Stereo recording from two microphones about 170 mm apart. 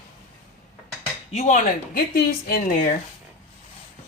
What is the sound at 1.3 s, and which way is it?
Speech, 45° left (ahead or behind).